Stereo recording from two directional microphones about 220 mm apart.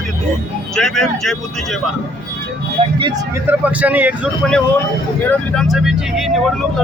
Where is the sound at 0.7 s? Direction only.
Centre (ahead or behind).